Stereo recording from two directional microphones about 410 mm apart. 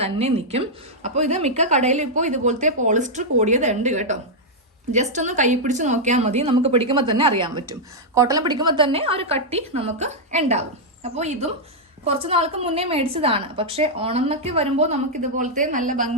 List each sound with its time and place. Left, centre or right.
0.0 s a woman's voice: centre